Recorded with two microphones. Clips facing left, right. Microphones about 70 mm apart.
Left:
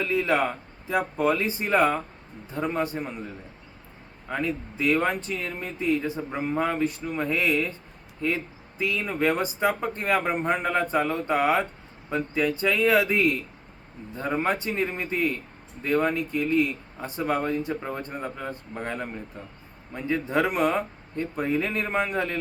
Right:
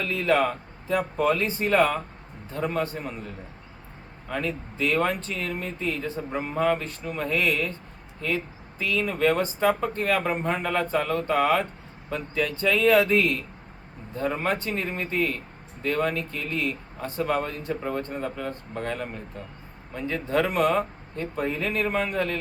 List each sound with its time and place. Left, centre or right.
0.0 s speech: centre
4.3 s speech: centre
8.8 s speech: centre